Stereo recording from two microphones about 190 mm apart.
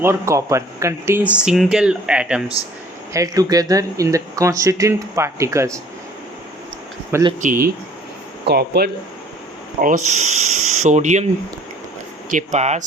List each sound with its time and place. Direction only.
0.0 s speech: 15° right (ahead or behind)
3.1 s speech: 20° right (ahead or behind)
7.1 s speech: 20° right (ahead or behind)
7.4 s speech: 45° right (ahead or behind)
8.4 s speech: 55° right (ahead or behind)
9.8 s speech: 40° right (ahead or behind)
12.3 s speech: 40° right (ahead or behind)